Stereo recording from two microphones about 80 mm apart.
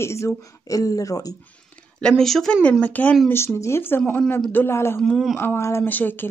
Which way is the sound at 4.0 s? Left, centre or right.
Centre.